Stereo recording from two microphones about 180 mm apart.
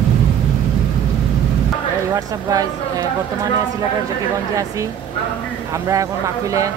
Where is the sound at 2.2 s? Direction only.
20° right (ahead or behind).